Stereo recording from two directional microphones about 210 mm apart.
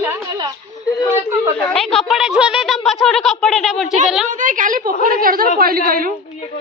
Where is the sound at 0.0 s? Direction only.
20° right (ahead or behind).